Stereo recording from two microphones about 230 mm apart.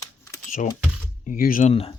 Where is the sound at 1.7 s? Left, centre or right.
Left.